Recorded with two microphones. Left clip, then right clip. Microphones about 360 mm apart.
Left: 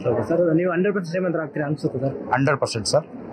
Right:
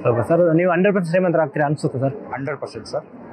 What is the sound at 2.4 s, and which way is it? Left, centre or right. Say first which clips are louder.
Speech: left 6 dB; left.